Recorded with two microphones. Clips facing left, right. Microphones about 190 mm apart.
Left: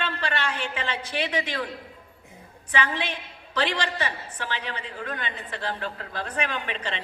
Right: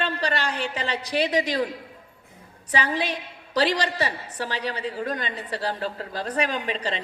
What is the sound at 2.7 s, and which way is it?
A woman's voice, 35° right (ahead or behind).